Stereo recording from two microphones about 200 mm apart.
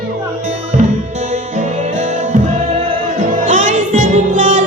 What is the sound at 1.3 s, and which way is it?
Music, 35° right (ahead or behind).